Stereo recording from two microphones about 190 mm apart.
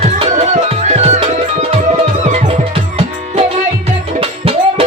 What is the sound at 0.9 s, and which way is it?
Music, 35° right (ahead or behind).